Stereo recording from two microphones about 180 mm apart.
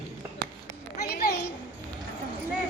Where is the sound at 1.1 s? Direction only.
60° left (ahead or behind).